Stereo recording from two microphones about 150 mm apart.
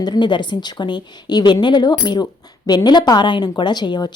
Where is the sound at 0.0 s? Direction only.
30° left (ahead or behind).